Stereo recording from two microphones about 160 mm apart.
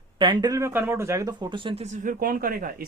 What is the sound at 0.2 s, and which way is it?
Speech, 25° right (ahead or behind).